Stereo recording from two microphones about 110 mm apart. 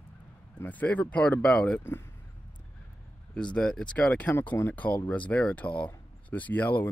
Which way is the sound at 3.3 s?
10° left (ahead or behind).